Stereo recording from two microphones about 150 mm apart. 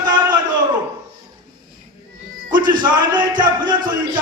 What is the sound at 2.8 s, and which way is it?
Speech, 30° right (ahead or behind).